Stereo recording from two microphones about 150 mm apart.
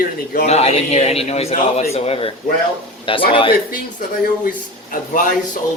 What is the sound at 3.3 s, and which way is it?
Speech, 35° left (ahead or behind).